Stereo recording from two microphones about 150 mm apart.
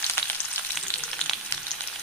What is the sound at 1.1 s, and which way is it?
Frying, centre (ahead or behind).